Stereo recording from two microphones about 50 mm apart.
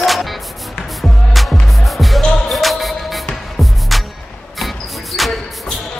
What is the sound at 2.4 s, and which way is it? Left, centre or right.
Basketball bounce, centre.